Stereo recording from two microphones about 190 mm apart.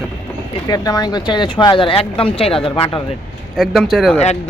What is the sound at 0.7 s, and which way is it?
Speech, 20° left (ahead or behind).